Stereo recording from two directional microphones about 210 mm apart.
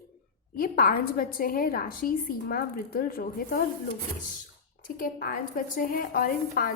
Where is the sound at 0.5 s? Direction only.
45° left (ahead or behind).